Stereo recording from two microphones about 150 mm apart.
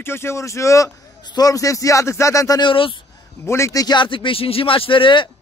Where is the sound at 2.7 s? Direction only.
35° left (ahead or behind).